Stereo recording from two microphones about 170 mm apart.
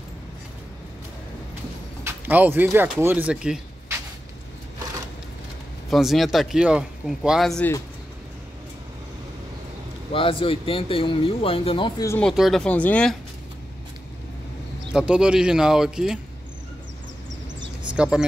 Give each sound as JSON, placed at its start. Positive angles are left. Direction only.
{"t": 2.0, "sound": "speech", "side_deg": -10}
{"t": 5.9, "sound": "speech", "side_deg": 0}
{"t": 10.1, "sound": "speech", "side_deg": 30}
{"t": 12.1, "sound": "speech", "side_deg": 5}
{"t": 14.9, "sound": "speech", "side_deg": -5}
{"t": 17.9, "sound": "speech", "side_deg": -5}